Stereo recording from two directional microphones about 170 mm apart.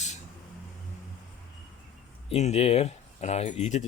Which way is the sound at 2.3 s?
40° left (ahead or behind).